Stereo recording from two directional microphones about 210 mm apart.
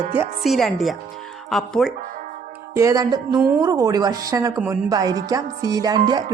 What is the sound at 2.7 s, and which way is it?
A woman's voice, 15° right (ahead or behind).